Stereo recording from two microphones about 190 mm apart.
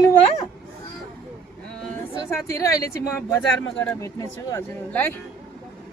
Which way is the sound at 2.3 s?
15° left (ahead or behind).